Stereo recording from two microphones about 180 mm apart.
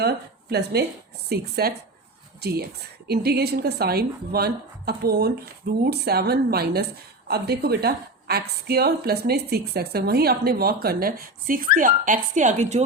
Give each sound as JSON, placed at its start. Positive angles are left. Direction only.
{"t": 0.5, "sound": "a woman's voice", "side_deg": -65}
{"t": 3.1, "sound": "a woman's voice", "side_deg": -60}